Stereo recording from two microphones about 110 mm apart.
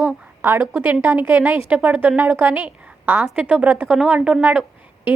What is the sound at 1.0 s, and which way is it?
A woman's voice, 20° right (ahead or behind).